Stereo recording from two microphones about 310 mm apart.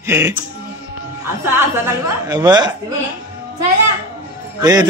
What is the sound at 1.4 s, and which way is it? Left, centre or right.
A man's voice, centre.